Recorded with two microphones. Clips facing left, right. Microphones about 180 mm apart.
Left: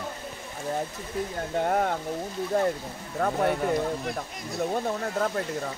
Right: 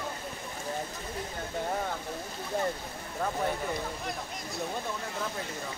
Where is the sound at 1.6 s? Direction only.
65° left (ahead or behind).